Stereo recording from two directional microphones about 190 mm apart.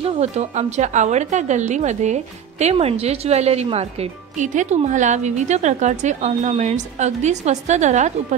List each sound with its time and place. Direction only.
0.0 s speech: 35° right (ahead or behind)